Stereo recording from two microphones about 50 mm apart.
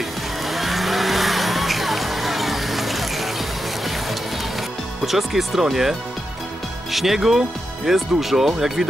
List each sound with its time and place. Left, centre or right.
0.5 s music: centre
5.0 s speech: centre